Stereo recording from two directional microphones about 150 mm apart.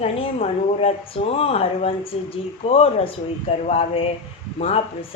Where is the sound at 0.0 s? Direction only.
40° left (ahead or behind).